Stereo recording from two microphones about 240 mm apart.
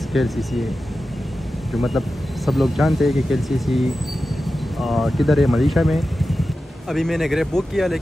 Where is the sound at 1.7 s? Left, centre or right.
Centre.